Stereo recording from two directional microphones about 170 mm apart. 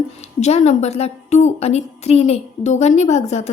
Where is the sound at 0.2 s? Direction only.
40° left (ahead or behind).